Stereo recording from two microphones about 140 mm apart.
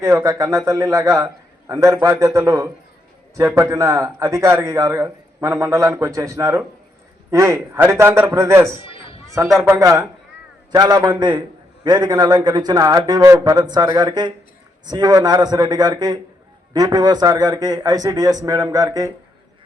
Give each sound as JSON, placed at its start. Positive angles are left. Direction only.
{"t": 0.0, "sound": "a man's voice", "side_deg": -20}